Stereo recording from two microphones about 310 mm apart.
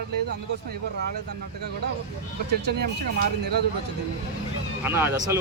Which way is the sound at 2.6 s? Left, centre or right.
Right.